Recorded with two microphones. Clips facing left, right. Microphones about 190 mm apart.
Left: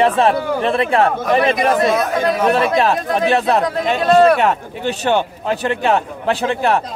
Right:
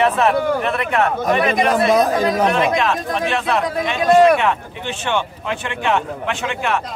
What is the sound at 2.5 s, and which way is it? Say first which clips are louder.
Speech: left 3 dB; 35° left (ahead or behind).